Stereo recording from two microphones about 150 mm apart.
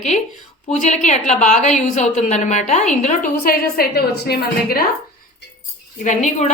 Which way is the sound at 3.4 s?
90° left.